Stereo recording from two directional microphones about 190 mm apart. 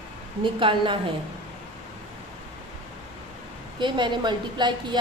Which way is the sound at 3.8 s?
25° right (ahead or behind).